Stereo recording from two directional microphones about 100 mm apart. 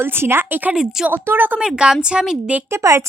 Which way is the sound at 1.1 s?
20° right (ahead or behind).